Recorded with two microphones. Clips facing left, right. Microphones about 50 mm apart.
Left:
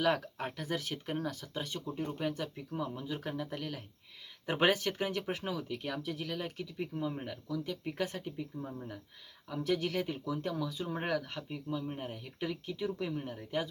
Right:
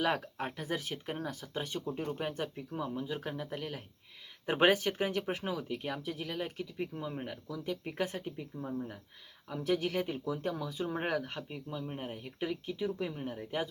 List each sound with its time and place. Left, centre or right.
0.0 s speech: centre
2.6 s speech: centre
8.5 s speech: centre